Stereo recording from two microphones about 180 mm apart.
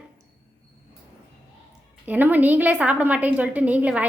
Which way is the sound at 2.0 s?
10° right (ahead or behind).